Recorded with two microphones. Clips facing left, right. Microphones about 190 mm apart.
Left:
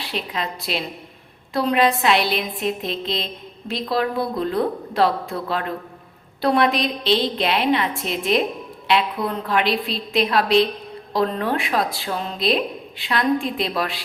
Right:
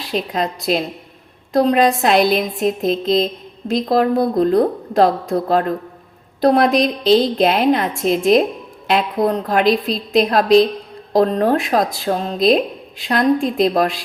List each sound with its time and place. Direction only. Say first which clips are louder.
0.0 s speech: right 7 dB; 45° right (ahead or behind)